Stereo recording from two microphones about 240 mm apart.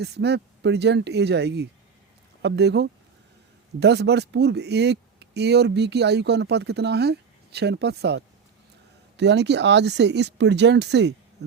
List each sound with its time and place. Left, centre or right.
0.0 s speech: right
11.4 s insect: right